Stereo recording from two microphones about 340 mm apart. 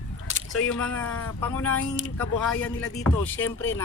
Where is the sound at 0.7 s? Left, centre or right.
Centre.